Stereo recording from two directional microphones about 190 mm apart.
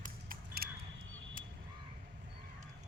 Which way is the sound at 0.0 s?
50° right (ahead or behind).